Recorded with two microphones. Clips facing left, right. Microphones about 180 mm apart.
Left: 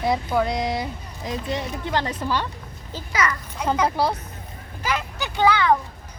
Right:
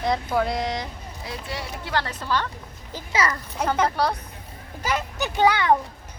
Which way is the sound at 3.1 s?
30° right (ahead or behind).